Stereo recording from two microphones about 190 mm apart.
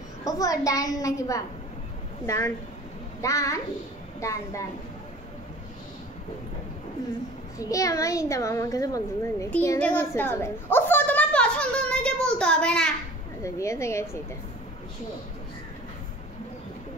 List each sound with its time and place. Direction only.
0.2 s a woman's voice: 20° left (ahead or behind)
7.5 s a child's voice: 15° left (ahead or behind)
13.4 s a woman's voice: 15° left (ahead or behind)